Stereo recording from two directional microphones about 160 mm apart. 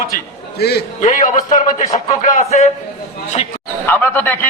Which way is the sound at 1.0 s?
50° left (ahead or behind).